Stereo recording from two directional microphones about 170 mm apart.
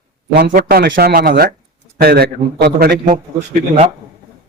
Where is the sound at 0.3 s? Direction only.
65° right (ahead or behind).